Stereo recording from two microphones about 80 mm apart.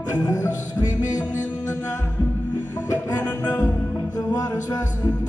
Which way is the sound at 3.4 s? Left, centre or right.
Left.